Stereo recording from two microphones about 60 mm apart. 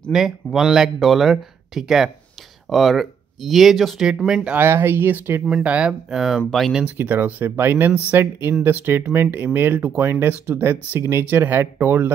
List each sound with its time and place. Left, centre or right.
0.1 s speech: centre
4.6 s speech: right
5.6 s speech: right
6.0 s speech: centre
6.8 s speech: right
7.9 s speech: right
8.2 s speech: right